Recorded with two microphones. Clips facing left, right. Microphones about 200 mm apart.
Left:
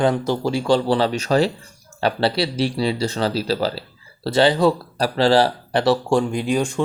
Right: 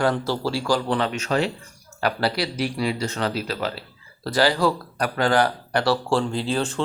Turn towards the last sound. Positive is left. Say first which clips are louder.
# left 4 dB
turn(degrees=15)  # may be behind; listen again after turning